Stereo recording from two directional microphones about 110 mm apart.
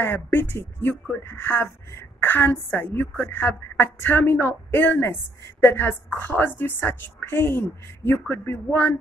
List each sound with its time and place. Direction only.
0.0 s a woman's voice: 20° left (ahead or behind)